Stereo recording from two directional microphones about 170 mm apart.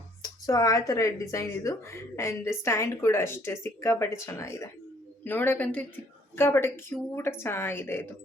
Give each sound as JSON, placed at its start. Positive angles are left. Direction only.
{"t": 0.4, "sound": "a woman's voice", "side_deg": 20}